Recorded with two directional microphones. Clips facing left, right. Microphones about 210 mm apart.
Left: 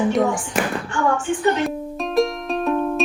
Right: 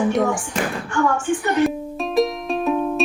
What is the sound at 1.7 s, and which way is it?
Music, centre (ahead or behind).